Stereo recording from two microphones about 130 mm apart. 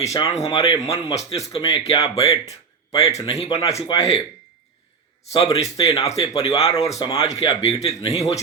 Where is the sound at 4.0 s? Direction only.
50° left (ahead or behind).